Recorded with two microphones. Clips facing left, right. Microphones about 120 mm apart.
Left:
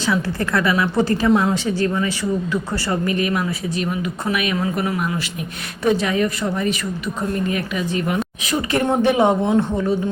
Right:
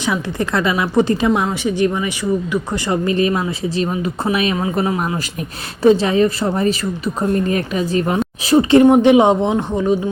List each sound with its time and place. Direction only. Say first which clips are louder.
0.0 s speech: right 1 dB; 20° right (ahead or behind)
8.8 s speech: right 3 dB; 20° right (ahead or behind)